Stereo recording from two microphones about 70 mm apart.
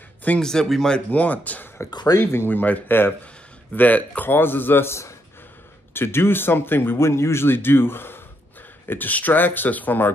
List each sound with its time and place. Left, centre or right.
0.4 s speech: centre
1.1 s a man's voice: left
1.9 s speech: left
2.1 s a man's voice: left